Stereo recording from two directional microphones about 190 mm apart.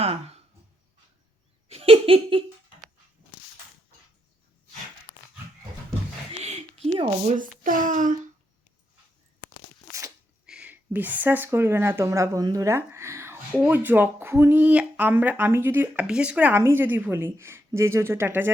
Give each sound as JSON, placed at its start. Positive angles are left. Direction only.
{"t": 0.0, "sound": "speech", "side_deg": -30}
{"t": 1.7, "sound": "laughter", "side_deg": -30}
{"t": 6.4, "sound": "a sound", "side_deg": -35}
{"t": 7.3, "sound": "speech", "side_deg": -45}
{"t": 10.4, "sound": "speech", "side_deg": -5}